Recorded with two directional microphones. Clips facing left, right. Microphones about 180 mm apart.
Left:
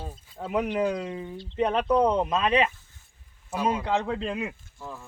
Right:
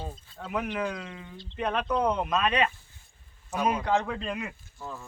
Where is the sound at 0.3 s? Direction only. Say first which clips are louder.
Left 5 dB; 30° left (ahead or behind).